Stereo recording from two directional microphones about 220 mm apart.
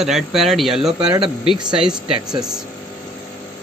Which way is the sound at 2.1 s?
20° right (ahead or behind).